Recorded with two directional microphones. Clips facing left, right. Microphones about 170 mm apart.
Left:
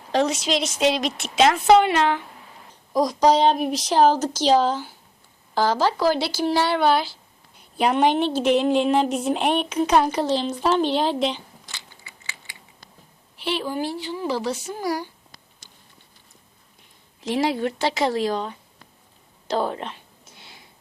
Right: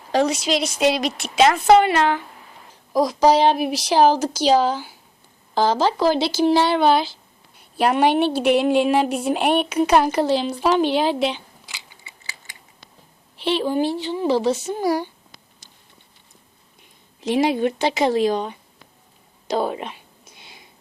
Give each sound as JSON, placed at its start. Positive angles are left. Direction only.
{"t": 0.1, "sound": "a woman's voice", "side_deg": -5}
{"t": 5.5, "sound": "speech", "side_deg": -20}
{"t": 7.8, "sound": "a woman's voice", "side_deg": -5}
{"t": 12.0, "sound": "scissors", "side_deg": -35}
{"t": 13.4, "sound": "speech", "side_deg": -25}
{"t": 17.2, "sound": "speech", "side_deg": -20}
{"t": 19.5, "sound": "a sound", "side_deg": -10}